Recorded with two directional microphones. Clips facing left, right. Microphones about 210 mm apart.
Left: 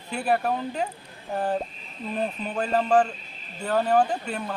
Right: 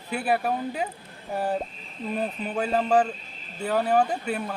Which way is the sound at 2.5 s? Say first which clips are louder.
Left 1 dB; 10° right (ahead or behind).